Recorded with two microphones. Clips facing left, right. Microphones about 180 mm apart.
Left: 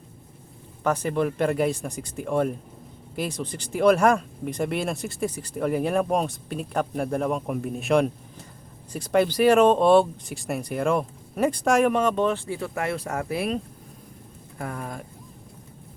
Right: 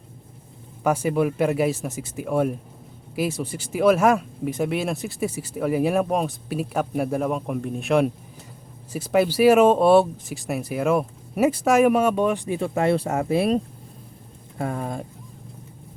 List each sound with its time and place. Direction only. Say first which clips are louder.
0.9 s speech: right 3 dB; 10° right (ahead or behind); by 13.6 s 30° right (ahead or behind)
14.6 s speech: right 6 dB; 25° right (ahead or behind)